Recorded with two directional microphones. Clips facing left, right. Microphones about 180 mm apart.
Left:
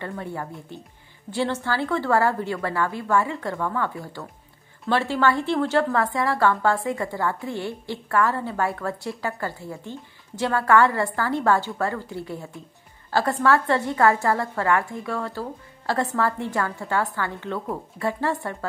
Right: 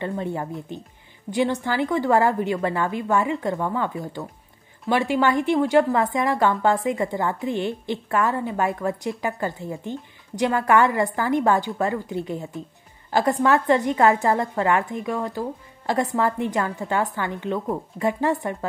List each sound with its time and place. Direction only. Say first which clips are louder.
0.0 s a woman's voice: right 4 dB; 20° right (ahead or behind)